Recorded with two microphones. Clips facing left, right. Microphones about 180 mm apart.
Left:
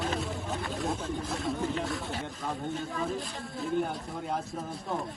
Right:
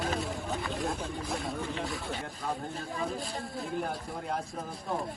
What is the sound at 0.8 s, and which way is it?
Speech, centre (ahead or behind).